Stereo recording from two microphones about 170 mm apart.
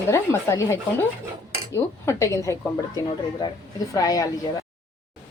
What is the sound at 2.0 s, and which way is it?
Speech, 15° left (ahead or behind).